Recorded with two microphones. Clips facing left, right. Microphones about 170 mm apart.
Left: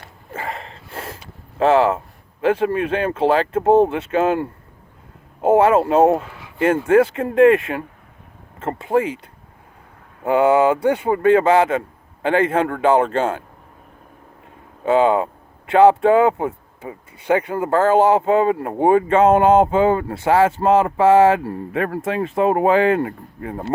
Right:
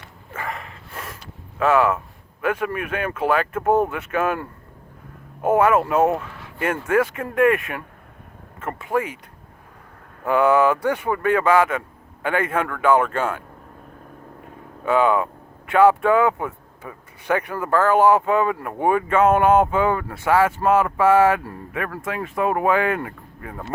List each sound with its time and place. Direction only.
0.0 s a sound: 25° left (ahead or behind)
2.4 s speech: 30° left (ahead or behind)
10.2 s speech: 20° left (ahead or behind)
14.8 s speech: 25° left (ahead or behind)